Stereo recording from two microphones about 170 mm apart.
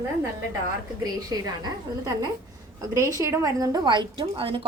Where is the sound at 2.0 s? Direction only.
20° right (ahead or behind).